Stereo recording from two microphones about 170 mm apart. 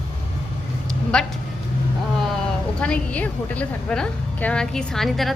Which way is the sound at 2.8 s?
5° left (ahead or behind).